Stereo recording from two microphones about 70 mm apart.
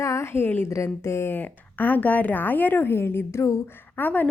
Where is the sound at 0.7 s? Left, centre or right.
Left.